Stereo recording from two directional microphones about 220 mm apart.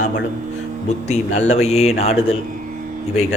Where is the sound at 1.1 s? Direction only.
30° left (ahead or behind).